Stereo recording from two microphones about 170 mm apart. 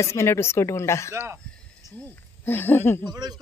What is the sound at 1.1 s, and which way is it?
Speech, 15° right (ahead or behind).